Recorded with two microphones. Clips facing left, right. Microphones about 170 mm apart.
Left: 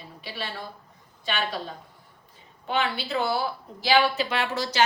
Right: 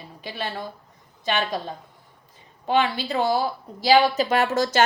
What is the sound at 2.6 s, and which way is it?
A woman's voice, 40° right (ahead or behind).